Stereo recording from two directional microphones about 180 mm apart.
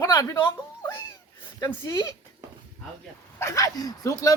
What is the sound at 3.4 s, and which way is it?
Speech, 15° left (ahead or behind).